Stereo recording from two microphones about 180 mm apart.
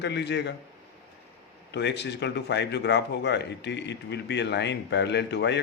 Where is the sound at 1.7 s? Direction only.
75° left (ahead or behind).